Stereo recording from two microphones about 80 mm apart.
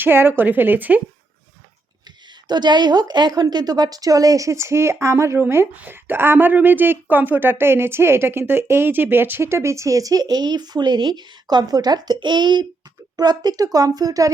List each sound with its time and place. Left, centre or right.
0.0 s a woman's voice: right
2.0 s speech: right
13.1 s speech: right